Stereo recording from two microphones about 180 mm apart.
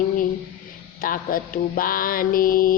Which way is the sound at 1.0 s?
50° left (ahead or behind).